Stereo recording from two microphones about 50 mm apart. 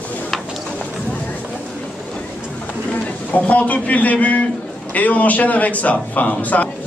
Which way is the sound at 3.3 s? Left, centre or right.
Left.